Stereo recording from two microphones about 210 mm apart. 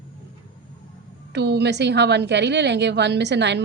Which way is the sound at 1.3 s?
55° right (ahead or behind).